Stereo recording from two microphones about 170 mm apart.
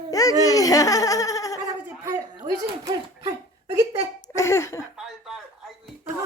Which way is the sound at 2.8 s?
20° right (ahead or behind).